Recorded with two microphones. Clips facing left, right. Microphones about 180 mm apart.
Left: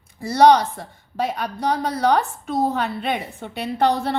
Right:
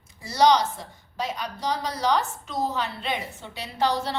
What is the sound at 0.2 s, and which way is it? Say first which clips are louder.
A woman's voice: left 6 dB; 55° left (ahead or behind).